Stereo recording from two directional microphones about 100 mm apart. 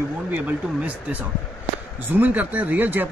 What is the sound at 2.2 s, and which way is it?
Speech, 15° right (ahead or behind).